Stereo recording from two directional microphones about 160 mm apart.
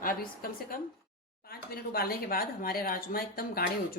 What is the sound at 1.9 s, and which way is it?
Speech, 70° left (ahead or behind).